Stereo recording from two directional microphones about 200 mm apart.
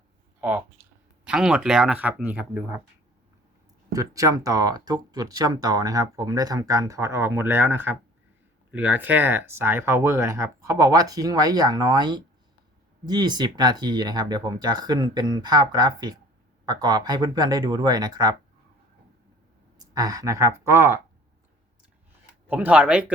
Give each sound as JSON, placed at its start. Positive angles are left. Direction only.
{"t": 1.2, "sound": "speech", "side_deg": -5}
{"t": 3.9, "sound": "speech", "side_deg": -15}
{"t": 19.9, "sound": "speech", "side_deg": -20}
{"t": 22.4, "sound": "speech", "side_deg": -10}